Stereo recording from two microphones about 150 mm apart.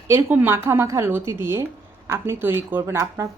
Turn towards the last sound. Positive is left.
turn(degrees=-15)  # may be behind; listen again after turning